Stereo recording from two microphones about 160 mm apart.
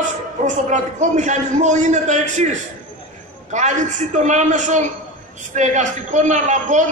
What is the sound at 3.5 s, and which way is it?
A man's voice, 50° right (ahead or behind).